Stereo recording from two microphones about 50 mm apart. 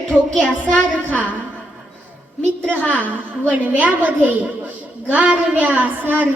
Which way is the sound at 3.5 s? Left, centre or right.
Right.